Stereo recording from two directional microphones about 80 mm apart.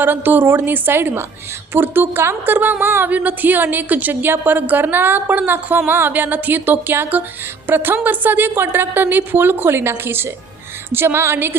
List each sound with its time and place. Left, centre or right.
0.0 s a woman's voice: right